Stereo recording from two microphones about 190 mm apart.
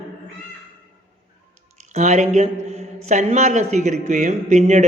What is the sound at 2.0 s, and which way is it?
A man's voice, 40° right (ahead or behind).